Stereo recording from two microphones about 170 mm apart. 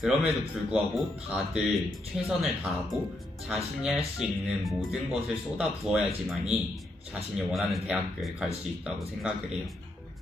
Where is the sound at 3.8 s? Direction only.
5° right (ahead or behind).